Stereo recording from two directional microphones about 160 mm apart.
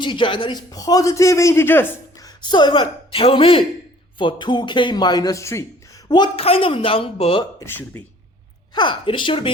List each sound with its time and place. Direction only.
0.0 s a man's voice: 30° left (ahead or behind); by 2.3 s 15° left (ahead or behind)
2.4 s a woman's voice: 30° left (ahead or behind)
7.6 s speech: 10° left (ahead or behind)
8.7 s a woman's voice: 30° left (ahead or behind)